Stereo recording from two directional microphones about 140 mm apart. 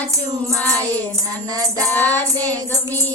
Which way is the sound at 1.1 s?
25° right (ahead or behind).